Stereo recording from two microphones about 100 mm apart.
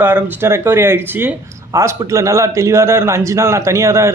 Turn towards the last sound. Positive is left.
turn(degrees=-30)  # may be behind; listen again after turning